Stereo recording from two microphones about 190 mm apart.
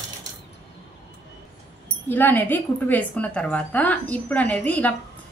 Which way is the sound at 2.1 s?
10° left (ahead or behind).